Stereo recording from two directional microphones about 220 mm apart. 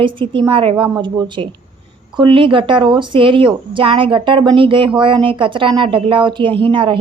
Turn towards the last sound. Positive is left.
turn(degrees=-25)  # may be behind; listen again after turning